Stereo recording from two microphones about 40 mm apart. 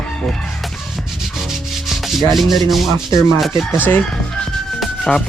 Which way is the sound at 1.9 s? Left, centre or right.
Centre.